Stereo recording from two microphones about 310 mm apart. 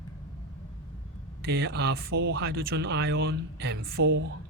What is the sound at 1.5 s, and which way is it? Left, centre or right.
Speech, right.